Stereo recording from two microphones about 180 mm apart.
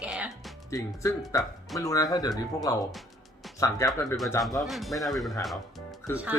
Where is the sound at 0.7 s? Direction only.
15° left (ahead or behind).